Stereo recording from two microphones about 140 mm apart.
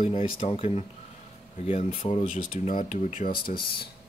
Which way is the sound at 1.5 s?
60° left (ahead or behind).